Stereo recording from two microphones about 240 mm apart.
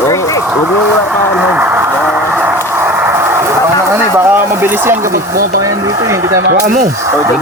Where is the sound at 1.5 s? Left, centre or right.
Centre.